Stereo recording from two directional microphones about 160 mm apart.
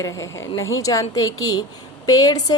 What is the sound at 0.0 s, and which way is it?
A woman's voice, 20° left (ahead or behind).